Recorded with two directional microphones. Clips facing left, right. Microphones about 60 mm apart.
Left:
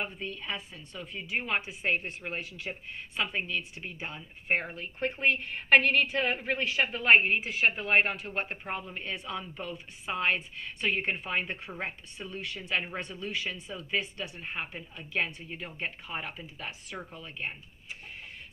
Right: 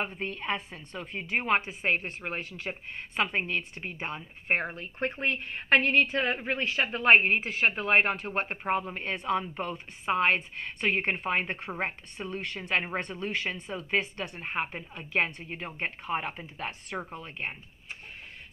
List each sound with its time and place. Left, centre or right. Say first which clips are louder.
0.0 s a woman's voice: right 3 dB; right
4.9 s a woman's voice: left 2 dB; right